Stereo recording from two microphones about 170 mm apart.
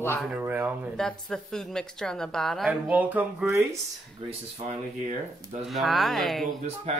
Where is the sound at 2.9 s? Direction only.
10° right (ahead or behind).